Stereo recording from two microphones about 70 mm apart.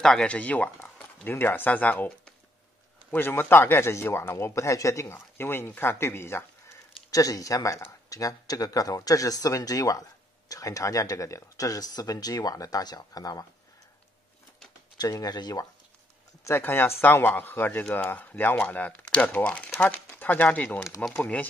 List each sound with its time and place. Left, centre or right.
0.0 s speech: centre
0.4 s a man's voice: left
3.1 s speech: left
5.1 s speech: left
7.1 s speech: left
15.0 s speech: left
16.4 s a man's voice: left